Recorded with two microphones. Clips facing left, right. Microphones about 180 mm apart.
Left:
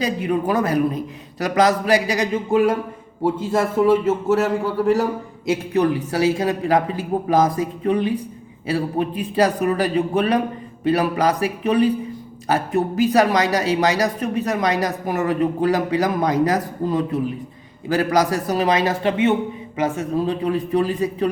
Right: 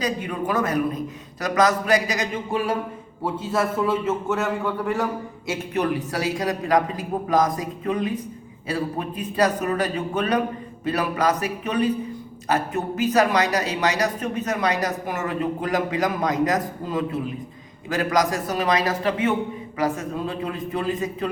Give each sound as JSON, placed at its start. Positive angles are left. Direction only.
{"t": 0.0, "sound": "speech", "side_deg": 30}
{"t": 5.5, "sound": "speech", "side_deg": 35}